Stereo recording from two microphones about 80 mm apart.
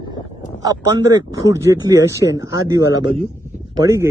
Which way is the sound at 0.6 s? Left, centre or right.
Right.